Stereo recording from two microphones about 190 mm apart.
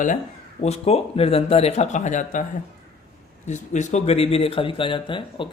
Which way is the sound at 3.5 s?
40° left (ahead or behind).